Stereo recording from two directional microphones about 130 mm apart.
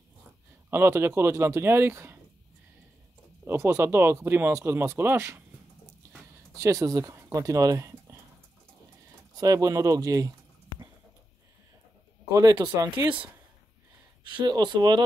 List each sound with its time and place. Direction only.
0.7 s speech: 20° right (ahead or behind)
3.4 s speech: 20° right (ahead or behind)
6.6 s speech: 25° right (ahead or behind)
9.4 s speech: 25° right (ahead or behind)
12.3 s speech: 25° right (ahead or behind)
14.4 s speech: 35° right (ahead or behind)